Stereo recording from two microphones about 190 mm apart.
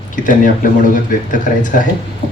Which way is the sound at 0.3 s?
45° left (ahead or behind).